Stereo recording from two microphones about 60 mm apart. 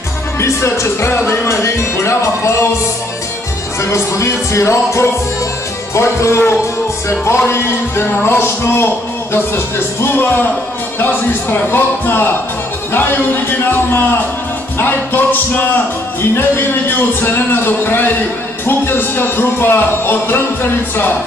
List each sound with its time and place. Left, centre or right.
0.4 s music: left
3.9 s music: left